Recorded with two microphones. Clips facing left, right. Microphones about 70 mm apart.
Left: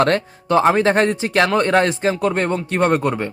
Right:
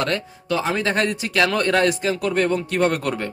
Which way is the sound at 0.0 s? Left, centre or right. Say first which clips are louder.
Left 7 dB; left.